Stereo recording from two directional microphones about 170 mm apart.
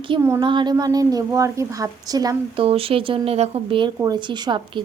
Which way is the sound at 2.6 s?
35° right (ahead or behind).